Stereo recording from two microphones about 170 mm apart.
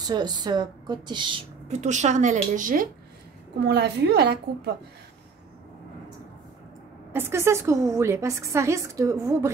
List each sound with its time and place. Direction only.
0.0 s speech: 25° right (ahead or behind)
1.7 s a woman's voice: 45° right (ahead or behind)
3.6 s a woman's voice: 80° right
7.1 s a woman's voice: 15° right (ahead or behind)